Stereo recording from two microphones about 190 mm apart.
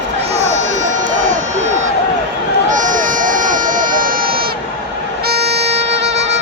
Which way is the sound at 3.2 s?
45° right (ahead or behind).